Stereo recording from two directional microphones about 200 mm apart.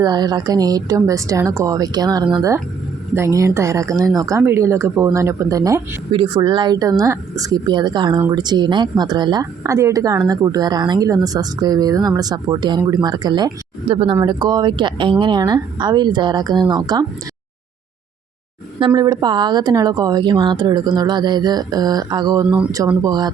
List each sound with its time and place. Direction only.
0.0 s a woman's voice: 20° right (ahead or behind)
18.9 s a woman's voice: 20° right (ahead or behind)
22.4 s speech: 5° right (ahead or behind)
23.0 s a woman's voice: 20° right (ahead or behind)